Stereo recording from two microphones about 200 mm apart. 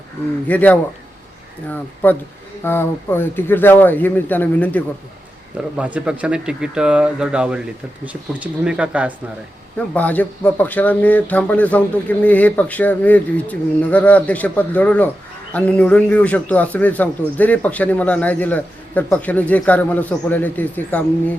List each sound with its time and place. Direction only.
0.4 s a man's voice: 10° left (ahead or behind)
5.7 s speech: 5° right (ahead or behind)
9.7 s a man's voice: 5° left (ahead or behind)